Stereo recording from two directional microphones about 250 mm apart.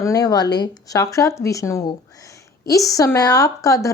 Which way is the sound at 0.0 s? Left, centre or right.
Centre.